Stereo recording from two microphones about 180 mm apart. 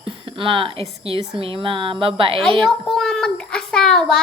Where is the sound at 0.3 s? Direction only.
30° right (ahead or behind).